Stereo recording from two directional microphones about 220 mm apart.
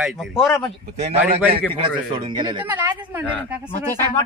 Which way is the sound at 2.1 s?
20° right (ahead or behind).